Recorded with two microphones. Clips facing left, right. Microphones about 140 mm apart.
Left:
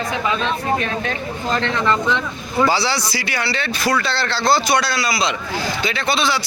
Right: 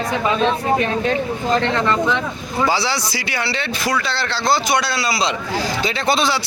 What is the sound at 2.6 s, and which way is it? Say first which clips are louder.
A man's voice: left 2 dB; 15° right (ahead or behind).